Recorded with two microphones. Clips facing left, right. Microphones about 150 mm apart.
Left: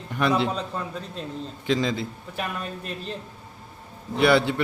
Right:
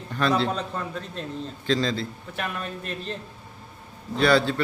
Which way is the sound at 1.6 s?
15° left (ahead or behind).